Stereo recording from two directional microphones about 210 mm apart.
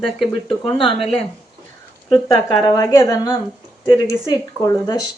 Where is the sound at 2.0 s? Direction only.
15° left (ahead or behind).